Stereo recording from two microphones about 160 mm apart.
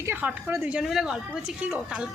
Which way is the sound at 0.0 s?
10° right (ahead or behind).